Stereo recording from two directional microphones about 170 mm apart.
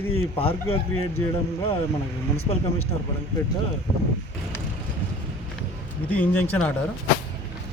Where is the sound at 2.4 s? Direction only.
35° left (ahead or behind).